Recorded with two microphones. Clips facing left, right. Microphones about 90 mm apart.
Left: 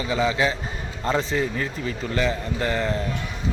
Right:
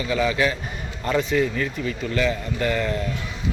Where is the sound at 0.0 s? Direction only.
25° left (ahead or behind).